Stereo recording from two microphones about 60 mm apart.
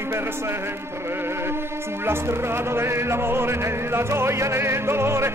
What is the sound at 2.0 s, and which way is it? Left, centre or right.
Music, right.